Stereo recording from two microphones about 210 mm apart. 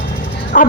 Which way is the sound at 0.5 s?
40° left (ahead or behind).